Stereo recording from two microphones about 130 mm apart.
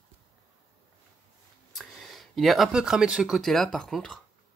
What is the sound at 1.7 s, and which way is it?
Speech, centre (ahead or behind).